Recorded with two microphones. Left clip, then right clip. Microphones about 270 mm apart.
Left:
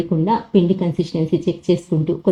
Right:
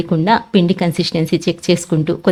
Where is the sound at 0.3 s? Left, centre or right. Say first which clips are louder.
Right 4 dB; right.